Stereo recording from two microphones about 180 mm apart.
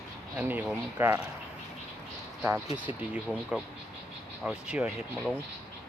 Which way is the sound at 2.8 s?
5° right (ahead or behind).